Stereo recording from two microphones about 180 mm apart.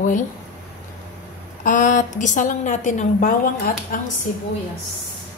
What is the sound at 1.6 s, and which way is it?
A woman's voice, 45° left (ahead or behind).